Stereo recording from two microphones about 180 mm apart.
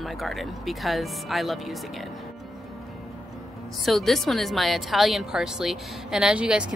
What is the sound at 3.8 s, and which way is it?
A woman's voice, centre (ahead or behind).